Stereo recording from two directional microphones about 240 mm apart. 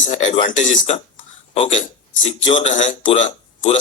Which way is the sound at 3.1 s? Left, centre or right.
Left.